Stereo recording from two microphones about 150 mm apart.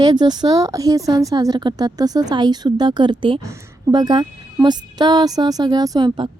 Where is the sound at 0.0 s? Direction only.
30° right (ahead or behind).